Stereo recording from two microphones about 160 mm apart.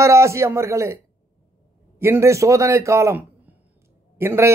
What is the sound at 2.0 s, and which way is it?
A man's voice, 15° right (ahead or behind).